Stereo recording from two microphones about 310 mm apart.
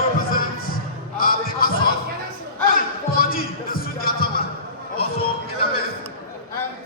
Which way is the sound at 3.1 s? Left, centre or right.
Left.